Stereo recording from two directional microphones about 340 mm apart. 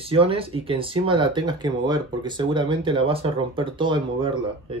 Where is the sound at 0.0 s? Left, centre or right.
Centre.